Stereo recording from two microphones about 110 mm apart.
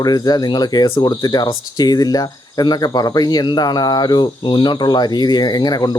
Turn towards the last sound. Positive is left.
turn(degrees=40)  # may be behind; listen again after turning